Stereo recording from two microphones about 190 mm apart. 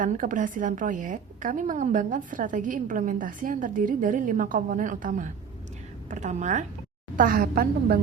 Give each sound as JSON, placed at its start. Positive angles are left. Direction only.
{"t": 0.0, "sound": "a woman's voice", "side_deg": -45}